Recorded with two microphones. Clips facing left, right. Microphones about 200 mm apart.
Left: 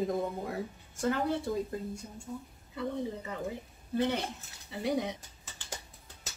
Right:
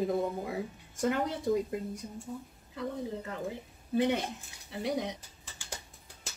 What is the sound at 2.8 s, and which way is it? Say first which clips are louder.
Speech: left 1 dB; centre (ahead or behind).